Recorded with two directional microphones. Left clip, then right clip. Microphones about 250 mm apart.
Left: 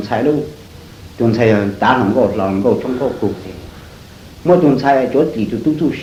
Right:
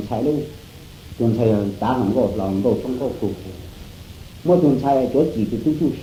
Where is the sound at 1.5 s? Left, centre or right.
Right.